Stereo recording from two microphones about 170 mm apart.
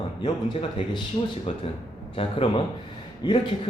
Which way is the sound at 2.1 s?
35° left (ahead or behind).